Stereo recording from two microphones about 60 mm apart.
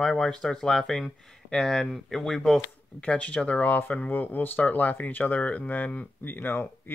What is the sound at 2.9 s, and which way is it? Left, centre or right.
Speech, left.